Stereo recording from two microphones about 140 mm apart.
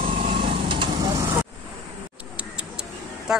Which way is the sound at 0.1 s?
70° right (ahead or behind).